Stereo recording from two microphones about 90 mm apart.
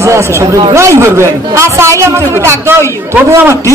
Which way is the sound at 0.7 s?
30° right (ahead or behind).